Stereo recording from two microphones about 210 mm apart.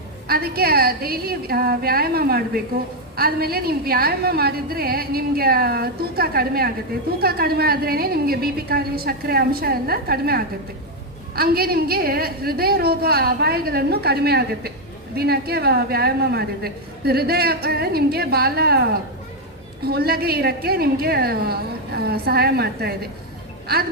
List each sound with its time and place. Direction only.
0.3 s a woman's voice: 45° right (ahead or behind)